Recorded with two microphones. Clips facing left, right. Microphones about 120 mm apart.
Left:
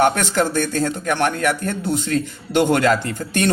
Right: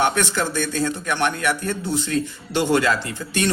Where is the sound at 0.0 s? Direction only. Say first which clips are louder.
Left 4 dB; 45° left (ahead or behind).